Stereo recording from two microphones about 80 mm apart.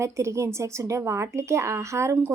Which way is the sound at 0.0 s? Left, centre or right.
Right.